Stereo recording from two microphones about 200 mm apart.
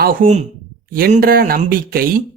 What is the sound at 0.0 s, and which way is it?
A man's voice, 45° right (ahead or behind).